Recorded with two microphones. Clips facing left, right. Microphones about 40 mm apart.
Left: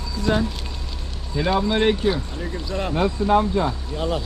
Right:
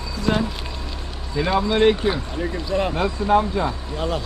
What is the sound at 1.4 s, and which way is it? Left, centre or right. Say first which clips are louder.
Speech: right 2 dB; centre.